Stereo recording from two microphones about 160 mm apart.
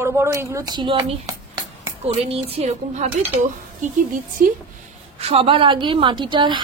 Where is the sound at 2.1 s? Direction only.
40° right (ahead or behind).